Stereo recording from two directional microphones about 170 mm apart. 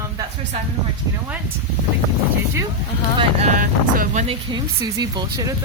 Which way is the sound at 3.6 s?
50° right (ahead or behind).